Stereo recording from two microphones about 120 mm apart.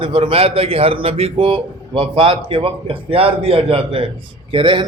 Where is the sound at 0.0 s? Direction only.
45° right (ahead or behind).